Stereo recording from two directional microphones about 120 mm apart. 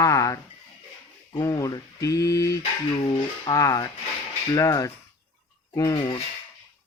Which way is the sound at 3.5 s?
25° left (ahead or behind).